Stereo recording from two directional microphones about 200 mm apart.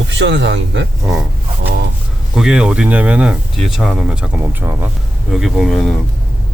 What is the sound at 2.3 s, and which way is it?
Speech, 5° right (ahead or behind).